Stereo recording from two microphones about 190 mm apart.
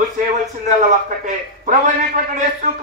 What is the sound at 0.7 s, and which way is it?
A man's voice, 40° right (ahead or behind).